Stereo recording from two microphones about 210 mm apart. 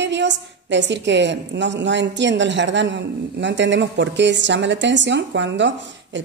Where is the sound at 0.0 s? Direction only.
55° right (ahead or behind).